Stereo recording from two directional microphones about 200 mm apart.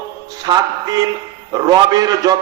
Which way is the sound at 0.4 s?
20° right (ahead or behind).